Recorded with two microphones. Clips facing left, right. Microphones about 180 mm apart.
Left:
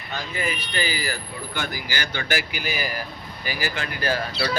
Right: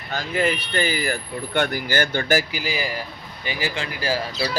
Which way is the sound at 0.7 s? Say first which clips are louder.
Right 4 dB; 50° right (ahead or behind).